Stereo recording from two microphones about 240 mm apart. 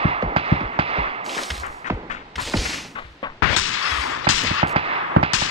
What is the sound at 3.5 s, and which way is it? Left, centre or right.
Gunshot, left.